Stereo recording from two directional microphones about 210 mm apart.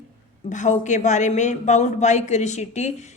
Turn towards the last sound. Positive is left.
turn(degrees=35)  # may be behind; listen again after turning